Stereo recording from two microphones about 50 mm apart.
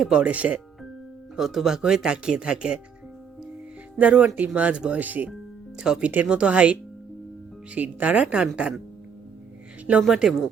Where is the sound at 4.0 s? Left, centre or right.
Right.